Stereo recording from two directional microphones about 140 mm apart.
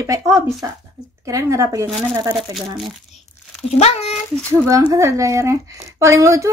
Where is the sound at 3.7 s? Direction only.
45° left (ahead or behind).